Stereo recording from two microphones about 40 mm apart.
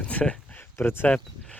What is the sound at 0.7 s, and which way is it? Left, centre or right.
Speech, left.